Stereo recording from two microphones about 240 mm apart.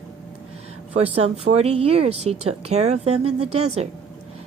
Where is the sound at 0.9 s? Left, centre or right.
Right.